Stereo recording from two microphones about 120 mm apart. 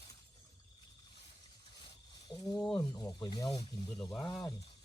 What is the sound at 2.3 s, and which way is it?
Speech, 35° left (ahead or behind).